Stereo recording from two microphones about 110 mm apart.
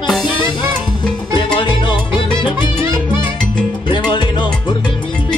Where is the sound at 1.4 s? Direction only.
45° left (ahead or behind).